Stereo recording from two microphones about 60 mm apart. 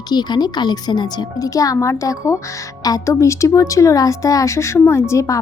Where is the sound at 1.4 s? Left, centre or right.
Left.